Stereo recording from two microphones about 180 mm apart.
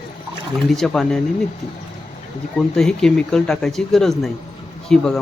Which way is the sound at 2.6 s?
5° left (ahead or behind).